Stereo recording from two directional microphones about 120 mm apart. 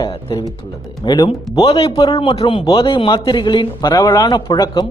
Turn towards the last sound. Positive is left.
turn(degrees=35)  # may be behind; listen again after turning